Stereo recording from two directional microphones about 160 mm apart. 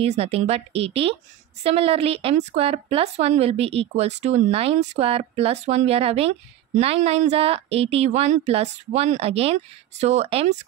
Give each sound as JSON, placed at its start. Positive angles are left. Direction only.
{"t": 0.0, "sound": "a woman's voice", "side_deg": -40}